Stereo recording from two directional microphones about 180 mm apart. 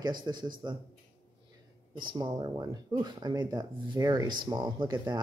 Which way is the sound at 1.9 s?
25° right (ahead or behind).